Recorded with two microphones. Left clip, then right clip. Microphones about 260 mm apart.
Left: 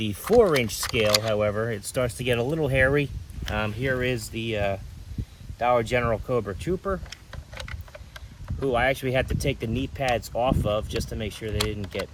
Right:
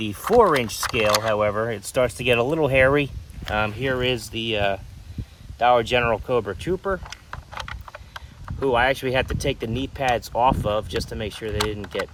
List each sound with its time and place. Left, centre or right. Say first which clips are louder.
0.0 s speech: right 2 dB; centre